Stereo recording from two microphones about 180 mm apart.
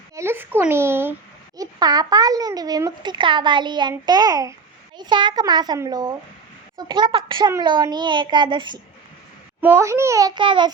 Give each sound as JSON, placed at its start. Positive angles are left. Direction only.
{"t": 0.2, "sound": "a child's voice", "side_deg": -15}
{"t": 9.6, "sound": "a child's voice", "side_deg": -10}